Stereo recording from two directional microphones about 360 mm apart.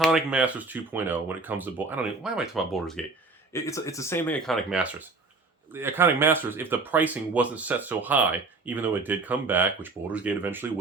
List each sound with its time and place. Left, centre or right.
0.0 s speech: centre